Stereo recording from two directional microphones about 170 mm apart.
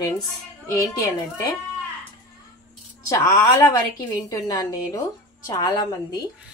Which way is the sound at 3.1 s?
20° left (ahead or behind).